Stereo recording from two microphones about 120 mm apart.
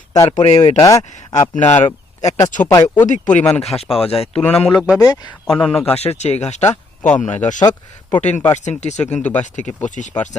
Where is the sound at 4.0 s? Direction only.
55° left (ahead or behind).